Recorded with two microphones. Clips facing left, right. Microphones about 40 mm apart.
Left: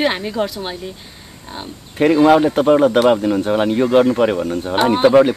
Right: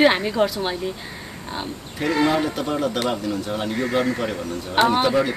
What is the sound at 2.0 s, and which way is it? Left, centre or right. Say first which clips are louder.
Speech: left 9 dB; left.